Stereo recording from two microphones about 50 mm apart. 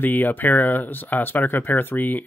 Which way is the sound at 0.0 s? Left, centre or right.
Left.